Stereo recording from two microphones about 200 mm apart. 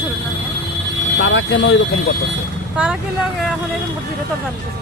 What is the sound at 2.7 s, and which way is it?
Speech, 5° right (ahead or behind).